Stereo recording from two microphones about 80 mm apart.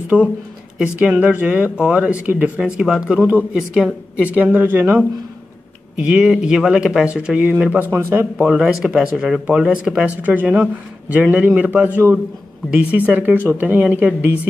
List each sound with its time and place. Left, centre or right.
0.1 s a woman's voice: centre
5.9 s speech: centre
7.9 s a woman's voice: right
8.4 s a woman's voice: centre